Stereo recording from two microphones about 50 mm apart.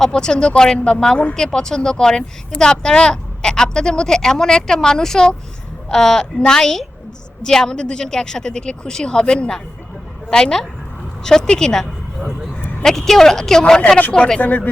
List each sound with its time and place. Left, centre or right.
0.0 s speech: centre
14.4 s speech: left